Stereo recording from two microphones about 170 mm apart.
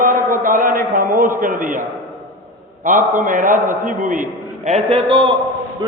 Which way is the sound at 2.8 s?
50° right (ahead or behind).